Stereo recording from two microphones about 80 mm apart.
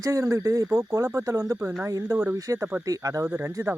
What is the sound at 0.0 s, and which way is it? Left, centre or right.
Speech, right.